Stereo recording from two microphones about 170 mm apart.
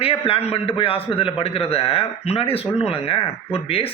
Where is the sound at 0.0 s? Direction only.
35° left (ahead or behind).